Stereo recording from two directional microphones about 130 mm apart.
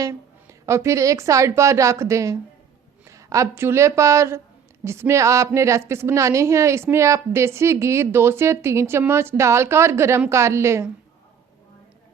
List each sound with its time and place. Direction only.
0.6 s a woman's voice: 20° right (ahead or behind)